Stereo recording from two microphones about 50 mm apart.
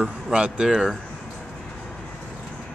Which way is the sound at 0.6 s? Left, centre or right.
Centre.